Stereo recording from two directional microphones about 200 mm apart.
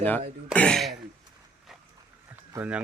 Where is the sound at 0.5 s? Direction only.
5° left (ahead or behind).